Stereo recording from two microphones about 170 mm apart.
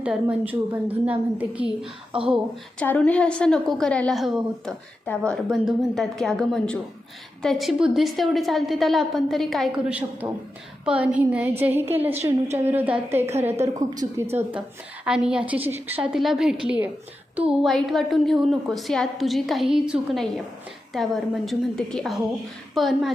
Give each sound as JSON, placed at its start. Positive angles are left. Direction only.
{"t": 0.0, "sound": "a woman's voice", "side_deg": -5}
{"t": 2.1, "sound": "speech", "side_deg": -30}
{"t": 2.7, "sound": "a woman's voice", "side_deg": 10}
{"t": 13.7, "sound": "a woman's voice", "side_deg": -20}